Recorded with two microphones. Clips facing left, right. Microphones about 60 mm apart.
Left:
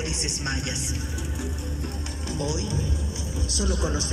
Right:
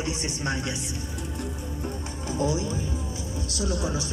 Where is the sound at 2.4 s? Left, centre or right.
Left.